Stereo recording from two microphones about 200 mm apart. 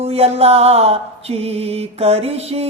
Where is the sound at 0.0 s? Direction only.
30° right (ahead or behind).